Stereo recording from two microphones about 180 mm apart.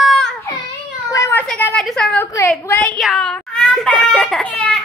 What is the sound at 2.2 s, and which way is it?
Speech, 15° left (ahead or behind).